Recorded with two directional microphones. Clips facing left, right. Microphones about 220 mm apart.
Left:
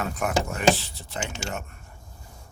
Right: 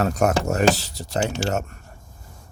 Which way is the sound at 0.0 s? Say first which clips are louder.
Right 6 dB; 40° right (ahead or behind).